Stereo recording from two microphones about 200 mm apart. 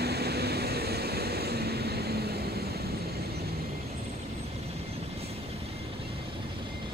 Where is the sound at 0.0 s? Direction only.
55° right (ahead or behind).